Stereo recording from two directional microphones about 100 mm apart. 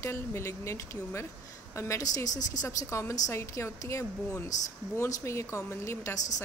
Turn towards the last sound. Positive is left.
turn(degrees=30)  # may be behind; listen again after turning